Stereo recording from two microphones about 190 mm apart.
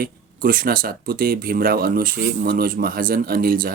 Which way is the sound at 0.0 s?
50° right (ahead or behind).